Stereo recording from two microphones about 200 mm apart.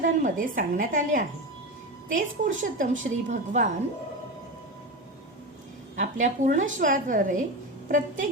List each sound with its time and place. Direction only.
0.2 s a woman's voice: 40° right (ahead or behind)
6.0 s a woman's voice: 40° right (ahead or behind)